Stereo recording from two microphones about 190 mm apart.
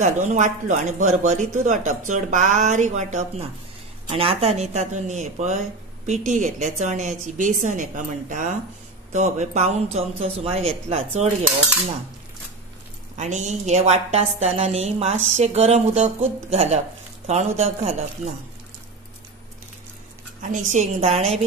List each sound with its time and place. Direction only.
0.0 s speech: 40° right (ahead or behind)
13.1 s speech: 40° right (ahead or behind)
20.4 s speech: 40° right (ahead or behind)